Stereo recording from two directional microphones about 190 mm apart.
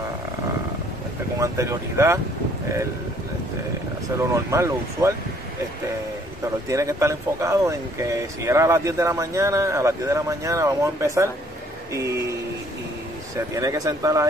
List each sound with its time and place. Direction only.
1.4 s speech: 15° right (ahead or behind)
4.3 s speech: 15° right (ahead or behind)
6.4 s speech: 15° right (ahead or behind)
11.9 s a sound: 15° right (ahead or behind)
13.6 s speech: 20° right (ahead or behind)